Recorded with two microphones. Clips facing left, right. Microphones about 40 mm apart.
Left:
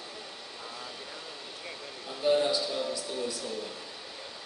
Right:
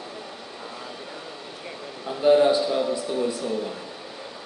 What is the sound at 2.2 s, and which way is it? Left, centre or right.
Speech, right.